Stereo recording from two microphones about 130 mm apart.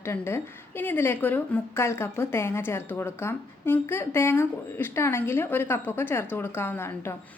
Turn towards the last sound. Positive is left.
turn(degrees=20)  # may be behind; listen again after turning